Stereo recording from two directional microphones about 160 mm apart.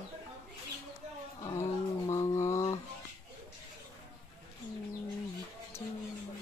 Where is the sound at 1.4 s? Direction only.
20° left (ahead or behind).